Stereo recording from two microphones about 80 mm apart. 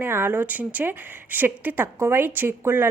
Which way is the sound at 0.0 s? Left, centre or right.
Right.